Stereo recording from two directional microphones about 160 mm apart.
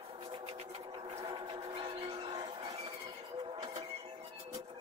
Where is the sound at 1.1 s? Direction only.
25° right (ahead or behind).